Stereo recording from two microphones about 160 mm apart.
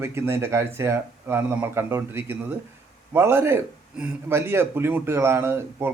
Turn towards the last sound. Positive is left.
turn(degrees=-15)  # may be behind; listen again after turning